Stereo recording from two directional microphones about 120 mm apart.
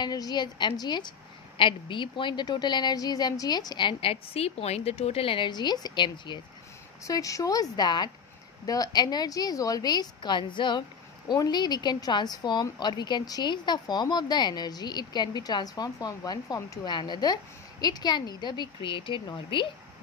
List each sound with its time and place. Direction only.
0.0 s speech: 35° left (ahead or behind)
7.0 s speech: 30° left (ahead or behind)